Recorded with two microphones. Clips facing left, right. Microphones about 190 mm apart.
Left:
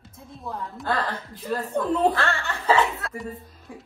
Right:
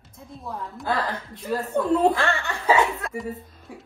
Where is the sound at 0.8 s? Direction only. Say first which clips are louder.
Right 1 dB; 15° right (ahead or behind).